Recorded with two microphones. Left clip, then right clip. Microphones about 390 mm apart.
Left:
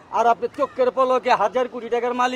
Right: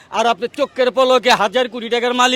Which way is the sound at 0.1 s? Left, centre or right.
Right.